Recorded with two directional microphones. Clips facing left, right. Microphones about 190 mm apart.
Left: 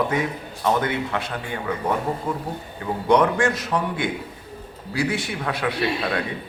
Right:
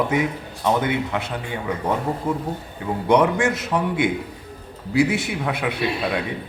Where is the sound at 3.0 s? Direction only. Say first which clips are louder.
Right 1 dB; 20° right (ahead or behind).